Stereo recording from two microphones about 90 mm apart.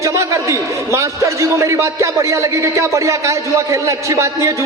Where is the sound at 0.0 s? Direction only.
35° right (ahead or behind).